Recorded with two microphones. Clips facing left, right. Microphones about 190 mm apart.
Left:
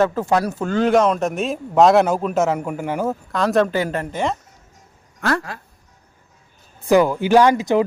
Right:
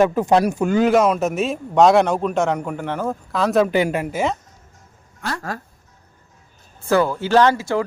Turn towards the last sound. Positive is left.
turn(degrees=20)  # may be behind; listen again after turning